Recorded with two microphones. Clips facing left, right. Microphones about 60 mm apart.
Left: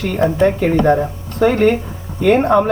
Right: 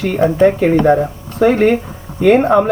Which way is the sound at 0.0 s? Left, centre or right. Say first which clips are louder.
Right 3 dB; right.